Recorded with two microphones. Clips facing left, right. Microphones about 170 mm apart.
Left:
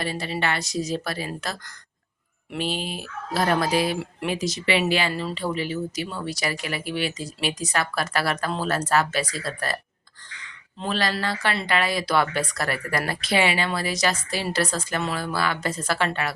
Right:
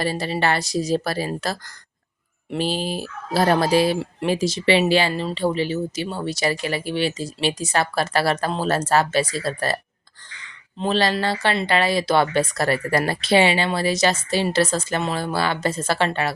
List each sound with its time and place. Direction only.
0.0 s speech: 35° right (ahead or behind)